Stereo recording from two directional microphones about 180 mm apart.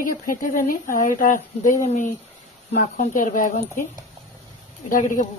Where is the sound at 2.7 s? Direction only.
45° left (ahead or behind).